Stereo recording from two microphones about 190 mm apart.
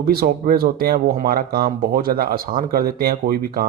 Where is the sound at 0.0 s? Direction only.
50° right (ahead or behind).